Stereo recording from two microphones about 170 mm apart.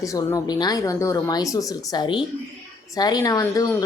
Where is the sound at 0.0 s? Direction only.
20° left (ahead or behind).